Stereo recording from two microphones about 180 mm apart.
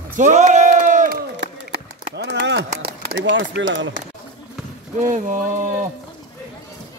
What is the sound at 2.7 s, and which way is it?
Speech, 55° right (ahead or behind).